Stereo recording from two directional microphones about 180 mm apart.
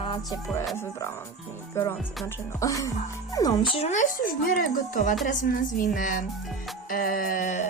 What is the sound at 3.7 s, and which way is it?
Music, 40° left (ahead or behind).